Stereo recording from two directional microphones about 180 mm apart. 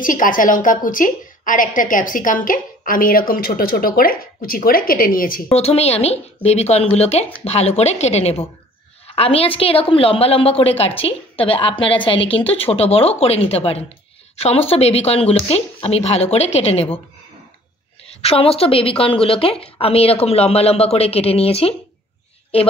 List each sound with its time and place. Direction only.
0.0 s a woman's voice: 50° left (ahead or behind)
5.6 s a woman's voice: 35° left (ahead or behind)
18.0 s a woman's voice: 35° left (ahead or behind)